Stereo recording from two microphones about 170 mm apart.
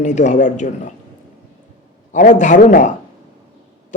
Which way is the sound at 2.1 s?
45° left (ahead or behind).